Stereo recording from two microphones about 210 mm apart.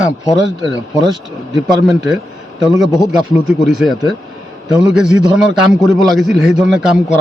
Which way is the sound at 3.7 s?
Centre (ahead or behind).